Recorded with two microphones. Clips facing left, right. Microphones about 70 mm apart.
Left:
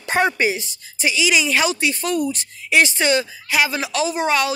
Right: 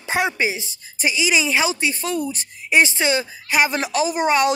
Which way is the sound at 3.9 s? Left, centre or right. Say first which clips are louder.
Right 1 dB; right.